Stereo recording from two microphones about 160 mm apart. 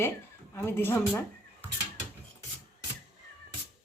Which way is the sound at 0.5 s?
15° left (ahead or behind).